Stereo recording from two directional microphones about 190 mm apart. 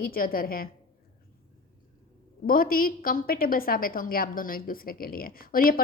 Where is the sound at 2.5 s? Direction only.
50° left (ahead or behind).